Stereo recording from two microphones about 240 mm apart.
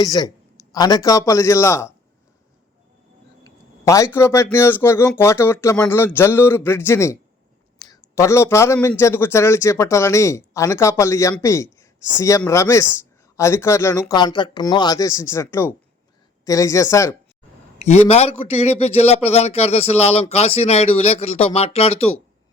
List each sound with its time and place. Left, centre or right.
0.0 s speech: centre
3.4 s speech: centre
17.7 s a man's voice: left